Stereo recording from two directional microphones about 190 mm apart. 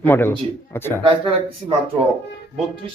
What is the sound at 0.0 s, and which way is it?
Speech, 10° left (ahead or behind).